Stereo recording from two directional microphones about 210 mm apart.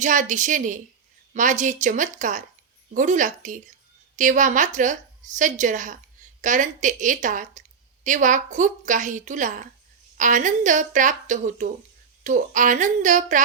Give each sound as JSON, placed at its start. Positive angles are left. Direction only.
{"t": 0.0, "sound": "a woman's voice", "side_deg": -35}